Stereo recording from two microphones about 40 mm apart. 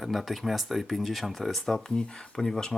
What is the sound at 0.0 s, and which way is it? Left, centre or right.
Speech, centre.